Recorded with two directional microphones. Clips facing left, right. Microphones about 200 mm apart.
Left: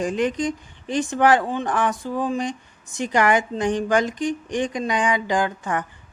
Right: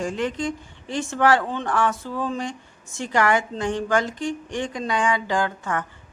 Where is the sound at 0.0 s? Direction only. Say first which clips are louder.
Left 3 dB; 15° left (ahead or behind).